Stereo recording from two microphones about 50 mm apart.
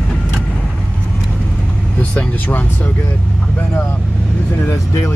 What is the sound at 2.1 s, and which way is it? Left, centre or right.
Speech, left.